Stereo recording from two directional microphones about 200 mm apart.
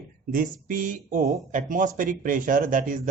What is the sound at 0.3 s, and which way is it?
A man's voice, 45° right (ahead or behind).